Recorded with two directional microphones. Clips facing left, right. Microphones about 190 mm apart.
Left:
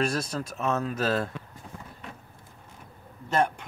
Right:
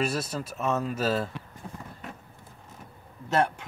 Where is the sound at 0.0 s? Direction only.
5° right (ahead or behind).